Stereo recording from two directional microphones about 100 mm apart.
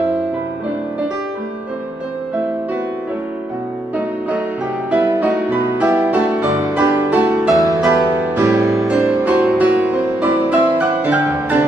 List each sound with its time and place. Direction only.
4.9 s music: 15° right (ahead or behind)
7.8 s music: 15° right (ahead or behind)